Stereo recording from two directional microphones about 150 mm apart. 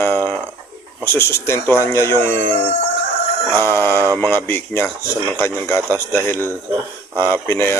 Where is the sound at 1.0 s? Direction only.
15° left (ahead or behind).